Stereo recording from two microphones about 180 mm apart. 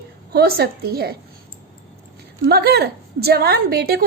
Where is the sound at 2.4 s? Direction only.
60° right (ahead or behind).